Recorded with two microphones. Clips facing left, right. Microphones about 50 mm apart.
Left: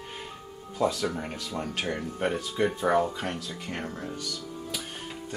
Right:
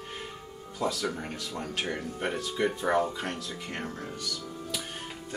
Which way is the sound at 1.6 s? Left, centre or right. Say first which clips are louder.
Left 1 dB; centre.